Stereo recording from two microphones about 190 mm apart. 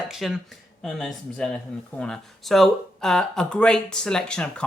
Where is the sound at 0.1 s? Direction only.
Centre (ahead or behind).